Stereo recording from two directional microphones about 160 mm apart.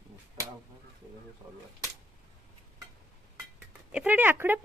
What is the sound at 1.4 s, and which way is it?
Speech, 10° right (ahead or behind).